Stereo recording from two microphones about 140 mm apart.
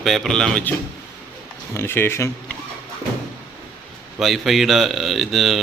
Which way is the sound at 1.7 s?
15° left (ahead or behind).